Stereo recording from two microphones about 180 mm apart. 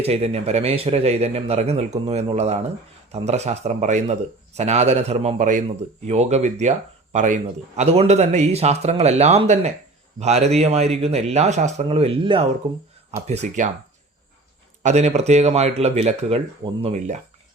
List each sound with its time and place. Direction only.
0.0 s speech: 35° right (ahead or behind)
14.8 s speech: 40° right (ahead or behind)